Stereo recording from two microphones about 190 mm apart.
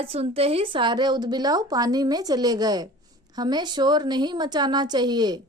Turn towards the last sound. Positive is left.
turn(degrees=-20)  # may be behind; listen again after turning